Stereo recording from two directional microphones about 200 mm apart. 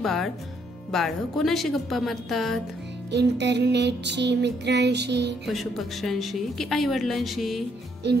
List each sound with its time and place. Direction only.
0.0 s a woman's voice: centre (ahead or behind)
3.1 s music: 60° right (ahead or behind)
5.5 s a woman's voice: centre (ahead or behind)
8.0 s music: 60° right (ahead or behind)